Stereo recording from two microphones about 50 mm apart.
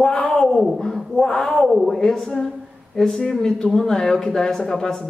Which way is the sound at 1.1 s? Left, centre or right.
Centre.